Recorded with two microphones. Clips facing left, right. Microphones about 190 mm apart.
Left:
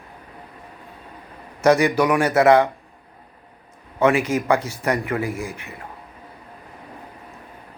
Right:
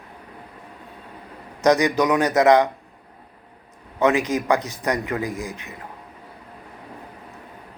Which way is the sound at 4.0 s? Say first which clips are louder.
Left 1 dB; 15° right (ahead or behind).